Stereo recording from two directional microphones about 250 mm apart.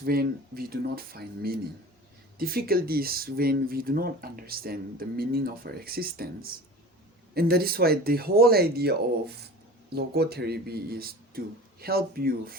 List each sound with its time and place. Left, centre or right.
0.0 s speech: right